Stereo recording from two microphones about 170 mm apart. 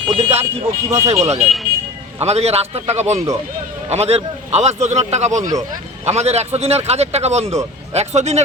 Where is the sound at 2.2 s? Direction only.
40° right (ahead or behind).